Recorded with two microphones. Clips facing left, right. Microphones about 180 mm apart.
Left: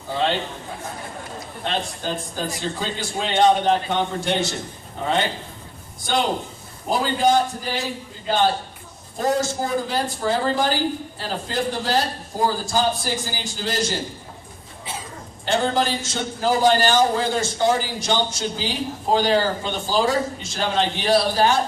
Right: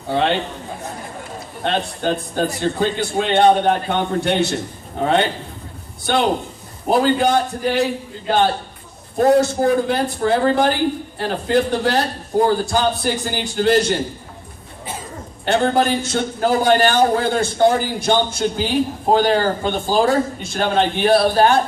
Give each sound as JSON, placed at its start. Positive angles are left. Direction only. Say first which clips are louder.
{"t": 0.1, "sound": "a man's voice", "louder": "right 4 dB", "side_deg": -60}
{"t": 1.6, "sound": "a man's voice", "louder": "right 6 dB", "side_deg": -60}
{"t": 6.9, "sound": "a man's voice", "louder": "right 3 dB", "side_deg": -60}
{"t": 9.1, "sound": "a man's voice", "louder": "right 8 dB", "side_deg": -60}
{"t": 15.4, "sound": "a man's voice", "louder": "right 4 dB", "side_deg": -60}